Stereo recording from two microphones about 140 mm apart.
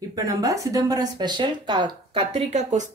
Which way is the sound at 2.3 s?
55° right (ahead or behind).